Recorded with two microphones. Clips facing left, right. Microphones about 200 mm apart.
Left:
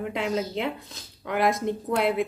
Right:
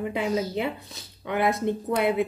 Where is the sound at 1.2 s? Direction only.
Centre (ahead or behind).